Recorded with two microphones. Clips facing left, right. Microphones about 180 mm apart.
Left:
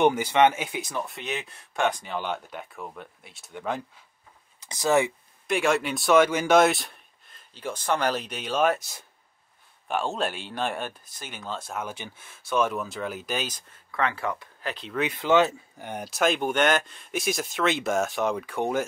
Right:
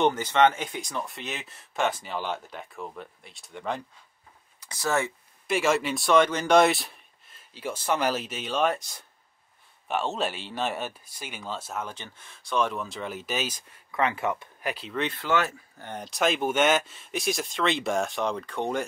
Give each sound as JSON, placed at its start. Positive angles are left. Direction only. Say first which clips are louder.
{"t": 0.0, "sound": "speech", "louder": "left 2 dB", "side_deg": 10}
{"t": 4.6, "sound": "speech", "louder": "left 5 dB", "side_deg": 20}
{"t": 5.5, "sound": "speech", "louder": "even", "side_deg": 0}
{"t": 11.8, "sound": "speech", "louder": "left 2 dB", "side_deg": 10}
{"t": 14.9, "sound": "speech", "louder": "left 3 dB", "side_deg": 5}
{"t": 15.1, "sound": "speech", "louder": "left 8 dB", "side_deg": 20}